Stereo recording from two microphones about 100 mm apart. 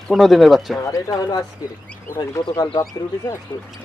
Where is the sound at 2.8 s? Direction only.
30° left (ahead or behind).